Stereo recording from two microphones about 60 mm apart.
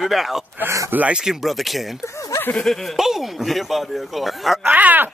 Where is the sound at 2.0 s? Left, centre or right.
Left.